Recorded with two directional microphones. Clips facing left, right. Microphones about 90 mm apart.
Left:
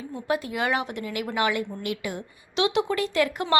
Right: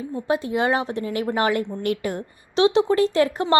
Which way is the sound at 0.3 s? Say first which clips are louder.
Right 4 dB; 30° right (ahead or behind).